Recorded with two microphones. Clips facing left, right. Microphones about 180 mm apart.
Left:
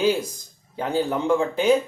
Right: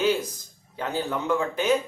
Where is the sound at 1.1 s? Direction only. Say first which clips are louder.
Left 3 dB; 25° left (ahead or behind).